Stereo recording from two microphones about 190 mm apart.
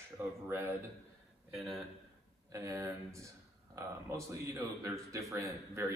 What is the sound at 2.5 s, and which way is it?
A man's voice, 15° right (ahead or behind).